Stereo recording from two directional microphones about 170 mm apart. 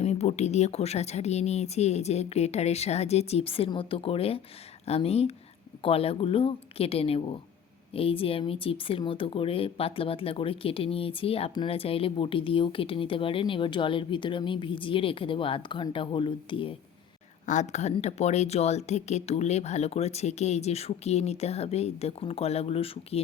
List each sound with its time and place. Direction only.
0.0 s speech: 40° left (ahead or behind)
17.4 s speech: 45° left (ahead or behind)